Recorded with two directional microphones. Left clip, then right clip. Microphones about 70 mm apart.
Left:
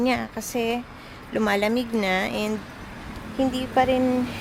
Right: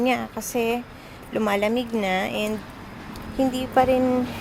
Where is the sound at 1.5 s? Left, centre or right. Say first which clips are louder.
Even; left.